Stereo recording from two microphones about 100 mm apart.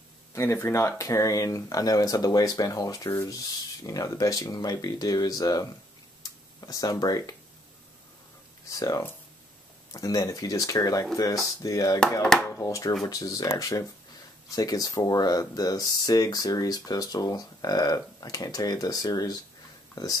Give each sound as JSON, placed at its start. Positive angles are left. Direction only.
{"t": 0.3, "sound": "speech", "side_deg": 25}
{"t": 8.6, "sound": "speech", "side_deg": 35}